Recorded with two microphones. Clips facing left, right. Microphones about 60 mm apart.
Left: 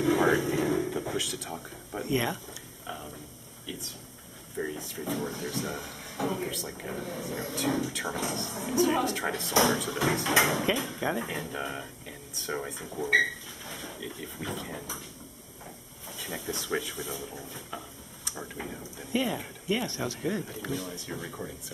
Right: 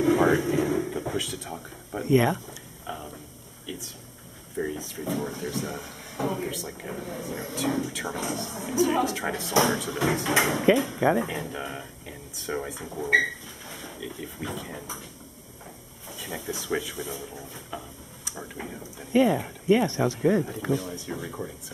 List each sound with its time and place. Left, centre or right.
0.0 s a sound: centre
2.1 s speech: centre
2.9 s a sound: centre
3.6 s speech: centre
16.2 s speech: centre
19.7 s speech: right
20.7 s speech: centre